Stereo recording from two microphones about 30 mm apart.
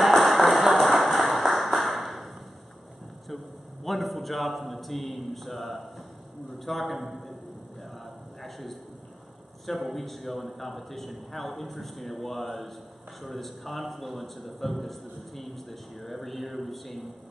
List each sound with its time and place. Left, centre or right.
0.1 s music: centre
1.0 s ping: centre
3.8 s a sound: centre
6.6 s a man's voice: centre
8.4 s a sound: centre
9.7 s a man's voice: centre